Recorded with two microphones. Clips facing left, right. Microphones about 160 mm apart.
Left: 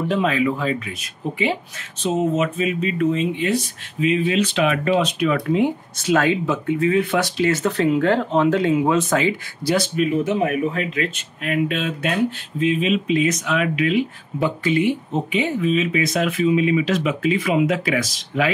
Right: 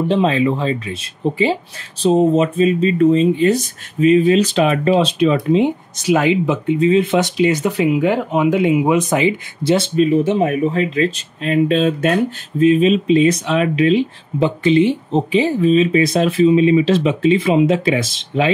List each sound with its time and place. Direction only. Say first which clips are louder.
0.1 s speech: right 3 dB; 30° right (ahead or behind)